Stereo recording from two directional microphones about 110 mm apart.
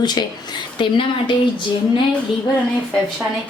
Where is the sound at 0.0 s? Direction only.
40° left (ahead or behind).